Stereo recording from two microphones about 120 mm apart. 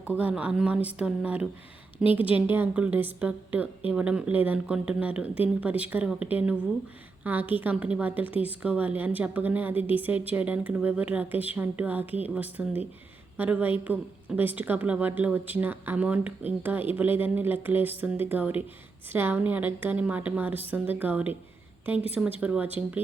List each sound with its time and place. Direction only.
0.2 s a woman's voice: 10° right (ahead or behind)
22.4 s a woman's voice: 10° right (ahead or behind)